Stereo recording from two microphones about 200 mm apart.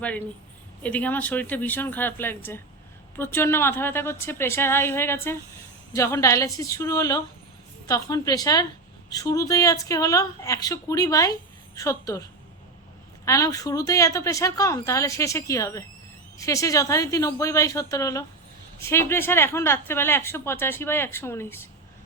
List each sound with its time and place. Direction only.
0.8 s a woman's voice: 5° left (ahead or behind)
13.2 s a woman's voice: 15° left (ahead or behind)